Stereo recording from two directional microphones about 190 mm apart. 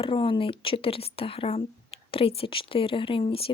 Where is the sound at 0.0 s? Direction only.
25° left (ahead or behind).